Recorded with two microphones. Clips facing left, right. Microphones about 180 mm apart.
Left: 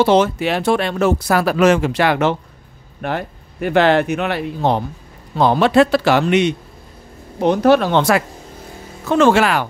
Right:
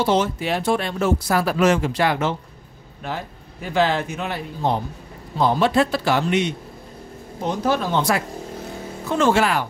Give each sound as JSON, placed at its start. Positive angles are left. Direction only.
{"t": 0.0, "sound": "speech", "side_deg": 75}